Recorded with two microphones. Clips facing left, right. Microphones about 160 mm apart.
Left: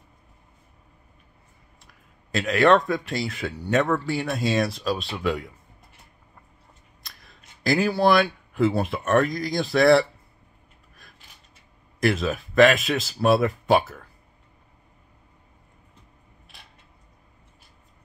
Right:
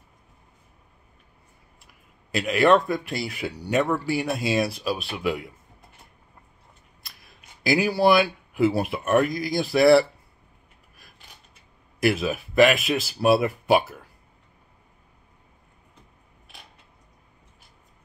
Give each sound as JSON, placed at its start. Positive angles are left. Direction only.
{"t": 2.3, "sound": "speech", "side_deg": -5}
{"t": 7.6, "sound": "speech", "side_deg": -5}
{"t": 12.0, "sound": "speech", "side_deg": -5}